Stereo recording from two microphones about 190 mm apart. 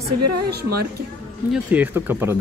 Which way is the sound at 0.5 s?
55° right (ahead or behind).